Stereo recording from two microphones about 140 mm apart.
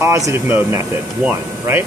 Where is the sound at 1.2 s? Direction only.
15° right (ahead or behind).